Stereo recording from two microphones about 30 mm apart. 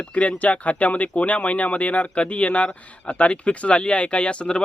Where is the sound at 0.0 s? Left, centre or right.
Left.